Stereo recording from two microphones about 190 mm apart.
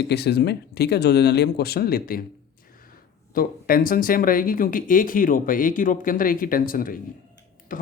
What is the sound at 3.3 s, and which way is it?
Speech, 50° left (ahead or behind).